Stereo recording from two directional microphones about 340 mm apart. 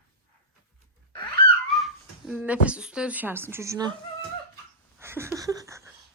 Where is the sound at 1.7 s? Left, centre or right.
Centre.